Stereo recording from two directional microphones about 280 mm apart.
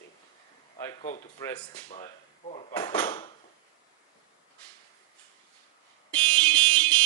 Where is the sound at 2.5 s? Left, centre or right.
Left.